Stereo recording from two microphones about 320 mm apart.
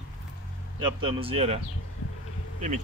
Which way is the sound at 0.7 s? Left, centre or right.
Centre.